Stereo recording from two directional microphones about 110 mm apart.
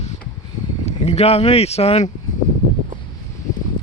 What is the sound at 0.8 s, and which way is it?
Speech, 75° left (ahead or behind).